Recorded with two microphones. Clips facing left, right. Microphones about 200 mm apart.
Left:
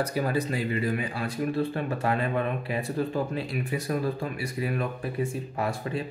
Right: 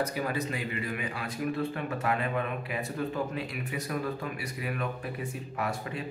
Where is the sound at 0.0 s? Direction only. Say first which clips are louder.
Left 4 dB; 35° left (ahead or behind).